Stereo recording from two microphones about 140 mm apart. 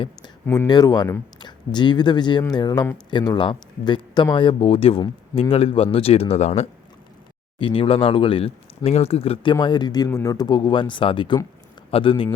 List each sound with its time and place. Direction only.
0.4 s speech: 15° left (ahead or behind)
0.7 s speech: 30° left (ahead or behind); by 6.7 s 50° left (ahead or behind)
7.6 s a man's voice: 40° left (ahead or behind)